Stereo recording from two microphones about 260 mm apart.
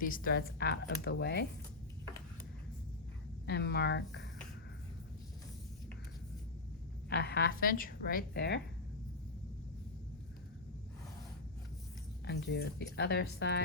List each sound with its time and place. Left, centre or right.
0.0 s a woman's voice: left
3.4 s a woman's voice: left
7.1 s a woman's voice: left
12.2 s a woman's voice: left